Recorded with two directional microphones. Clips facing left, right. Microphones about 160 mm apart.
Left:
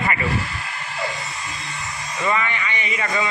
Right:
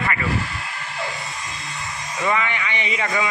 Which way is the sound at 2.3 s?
15° right (ahead or behind).